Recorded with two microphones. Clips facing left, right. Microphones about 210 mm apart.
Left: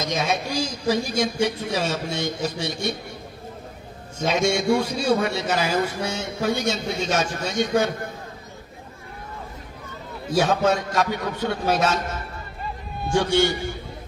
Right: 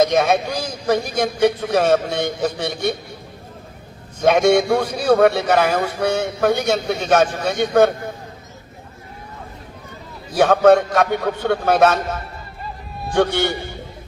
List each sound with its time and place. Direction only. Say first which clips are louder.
0.0 s a man's voice: right 9 dB; 55° right (ahead or behind)
4.2 s a man's voice: right 8 dB; 55° right (ahead or behind)
10.3 s a man's voice: right 8 dB; 60° right (ahead or behind)